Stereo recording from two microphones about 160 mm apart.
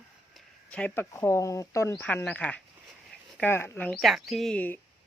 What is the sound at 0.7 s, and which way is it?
Speech, 10° left (ahead or behind).